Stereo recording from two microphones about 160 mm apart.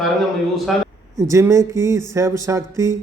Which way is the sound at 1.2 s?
20° right (ahead or behind).